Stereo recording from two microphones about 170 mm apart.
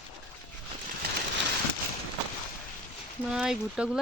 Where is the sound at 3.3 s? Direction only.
5° right (ahead or behind).